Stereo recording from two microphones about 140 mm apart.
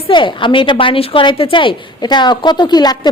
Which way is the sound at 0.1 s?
35° left (ahead or behind).